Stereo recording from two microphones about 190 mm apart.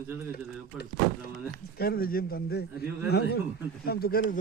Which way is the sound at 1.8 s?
50° left (ahead or behind).